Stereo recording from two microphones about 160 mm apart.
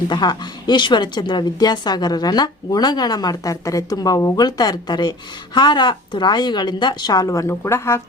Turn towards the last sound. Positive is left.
turn(degrees=15)  # may be behind; listen again after turning